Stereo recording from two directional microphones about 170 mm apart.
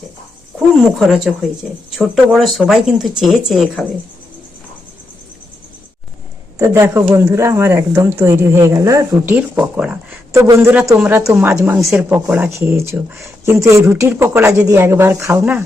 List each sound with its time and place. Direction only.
0.9 s speech: centre (ahead or behind)
6.6 s speech: 15° right (ahead or behind)